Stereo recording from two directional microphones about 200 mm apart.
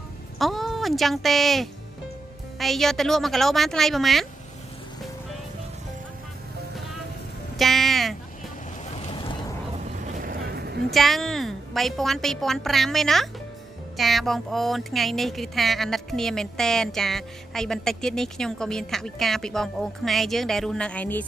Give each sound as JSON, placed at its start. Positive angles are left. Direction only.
{"t": 0.4, "sound": "speech", "side_deg": 0}
{"t": 7.5, "sound": "music", "side_deg": 0}
{"t": 8.9, "sound": "boat", "side_deg": 30}
{"t": 9.8, "sound": "vehicle", "side_deg": -40}
{"t": 10.9, "sound": "speech", "side_deg": 0}